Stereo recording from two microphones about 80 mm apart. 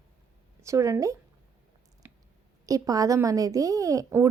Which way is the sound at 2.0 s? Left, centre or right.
Right.